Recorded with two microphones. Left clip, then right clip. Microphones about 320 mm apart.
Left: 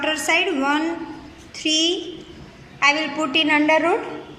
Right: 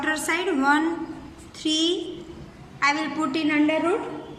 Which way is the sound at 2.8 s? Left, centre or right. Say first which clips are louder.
Left 5 dB; centre.